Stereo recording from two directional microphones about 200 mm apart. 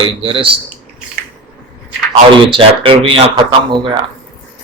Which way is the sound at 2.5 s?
25° right (ahead or behind).